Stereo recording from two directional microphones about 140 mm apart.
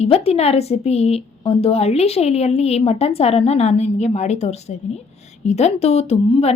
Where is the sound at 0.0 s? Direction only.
45° left (ahead or behind).